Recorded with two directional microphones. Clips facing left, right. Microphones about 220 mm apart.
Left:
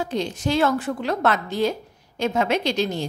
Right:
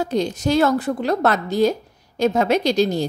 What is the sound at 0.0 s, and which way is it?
A woman's voice, 40° right (ahead or behind).